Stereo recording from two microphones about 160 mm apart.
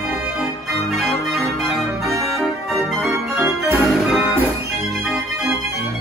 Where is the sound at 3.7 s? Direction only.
5° right (ahead or behind).